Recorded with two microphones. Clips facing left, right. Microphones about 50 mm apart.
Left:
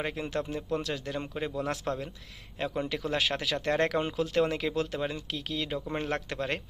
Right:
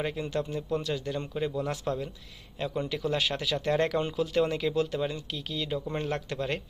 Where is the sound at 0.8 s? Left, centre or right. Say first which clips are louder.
Right 2 dB; left.